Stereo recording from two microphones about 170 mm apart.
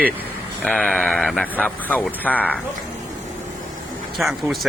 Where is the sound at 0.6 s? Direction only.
5° left (ahead or behind).